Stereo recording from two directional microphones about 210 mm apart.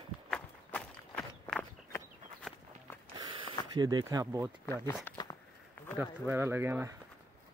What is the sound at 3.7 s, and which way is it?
Speech, 20° right (ahead or behind).